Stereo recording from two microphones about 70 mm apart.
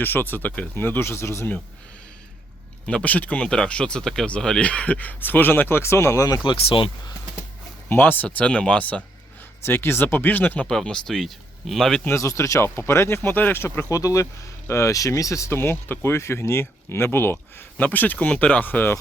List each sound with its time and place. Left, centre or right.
0.0 s speech: left
2.8 s speech: centre; by 6.2 s left
6.2 s speech: left
7.9 s speech: left
9.6 s speech: left
10.7 s speech: centre
12.1 s speech: left
13.9 s speech: left